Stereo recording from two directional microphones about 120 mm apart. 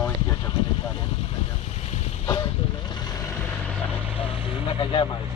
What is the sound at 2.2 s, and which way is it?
Speech, 35° left (ahead or behind).